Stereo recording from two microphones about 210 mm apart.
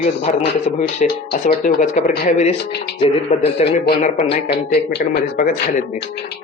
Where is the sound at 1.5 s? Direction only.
35° left (ahead or behind).